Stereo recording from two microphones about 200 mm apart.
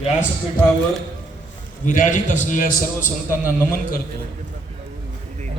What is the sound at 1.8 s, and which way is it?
Speech, 40° left (ahead or behind).